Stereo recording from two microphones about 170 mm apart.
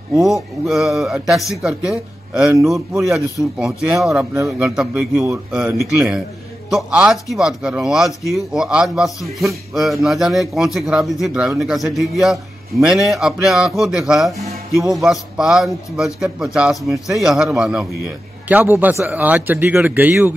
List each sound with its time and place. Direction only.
0.2 s a man's voice: centre (ahead or behind)
4.3 s a man's voice: 15° right (ahead or behind)
4.6 s a man's voice: 5° right (ahead or behind)